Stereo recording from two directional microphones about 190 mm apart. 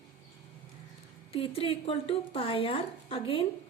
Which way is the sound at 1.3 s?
30° left (ahead or behind).